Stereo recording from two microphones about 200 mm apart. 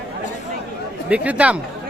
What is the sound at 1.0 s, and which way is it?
Speech, 5° right (ahead or behind).